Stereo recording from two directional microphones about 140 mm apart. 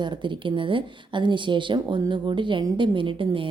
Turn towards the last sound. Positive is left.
turn(degrees=-40)  # may be behind; listen again after turning